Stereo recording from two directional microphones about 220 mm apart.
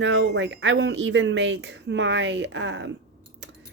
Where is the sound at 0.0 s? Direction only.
55° right (ahead or behind).